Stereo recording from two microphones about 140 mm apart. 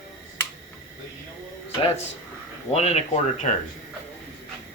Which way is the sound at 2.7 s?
50° left (ahead or behind).